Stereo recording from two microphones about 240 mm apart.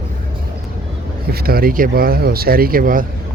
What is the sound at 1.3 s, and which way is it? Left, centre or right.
Speech, right.